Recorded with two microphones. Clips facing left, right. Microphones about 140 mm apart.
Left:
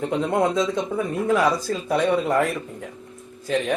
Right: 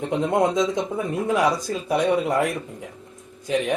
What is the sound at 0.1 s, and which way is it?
Speech, 20° right (ahead or behind).